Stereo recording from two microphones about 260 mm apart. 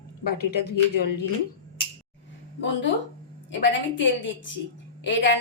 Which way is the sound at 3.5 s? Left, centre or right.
Left.